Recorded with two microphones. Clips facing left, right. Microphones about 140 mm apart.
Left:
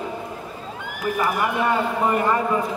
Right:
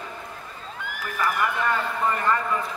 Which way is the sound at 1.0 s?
15° left (ahead or behind).